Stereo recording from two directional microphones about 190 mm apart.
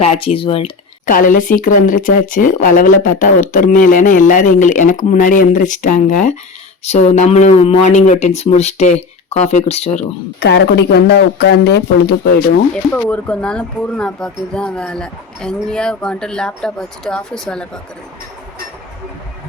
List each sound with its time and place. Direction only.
0.0 s speech: 35° left (ahead or behind)
1.0 s speech: 45° left (ahead or behind)
10.4 s speech: 65° left (ahead or behind)
12.7 s speech: 5° left (ahead or behind)